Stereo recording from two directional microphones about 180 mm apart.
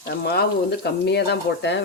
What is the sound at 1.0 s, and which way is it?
Speech, 70° left (ahead or behind).